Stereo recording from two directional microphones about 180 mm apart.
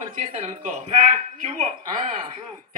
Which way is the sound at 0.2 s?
40° right (ahead or behind).